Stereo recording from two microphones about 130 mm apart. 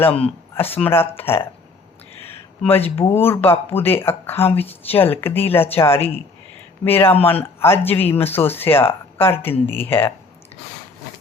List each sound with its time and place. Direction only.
0.5 s speech: 15° left (ahead or behind)
2.2 s a sound: 15° left (ahead or behind)
2.9 s speech: 20° left (ahead or behind)